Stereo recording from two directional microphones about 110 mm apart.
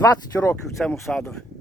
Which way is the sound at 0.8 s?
Centre (ahead or behind).